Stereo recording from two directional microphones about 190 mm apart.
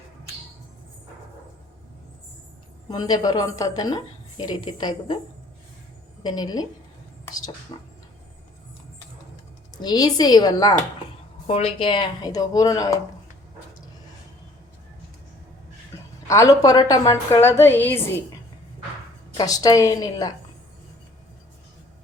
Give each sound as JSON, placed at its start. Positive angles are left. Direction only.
{"t": 2.9, "sound": "a woman's voice", "side_deg": 20}
{"t": 6.2, "sound": "a woman's voice", "side_deg": 20}
{"t": 7.7, "sound": "a woman's voice", "side_deg": 20}
{"t": 9.7, "sound": "a woman's voice", "side_deg": 20}
{"t": 11.4, "sound": "a woman's voice", "side_deg": 30}
{"t": 16.2, "sound": "a woman's voice", "side_deg": 15}
{"t": 19.3, "sound": "a woman's voice", "side_deg": 20}